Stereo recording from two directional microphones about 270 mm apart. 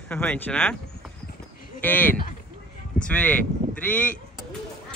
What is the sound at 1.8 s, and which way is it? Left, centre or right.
Speech, centre.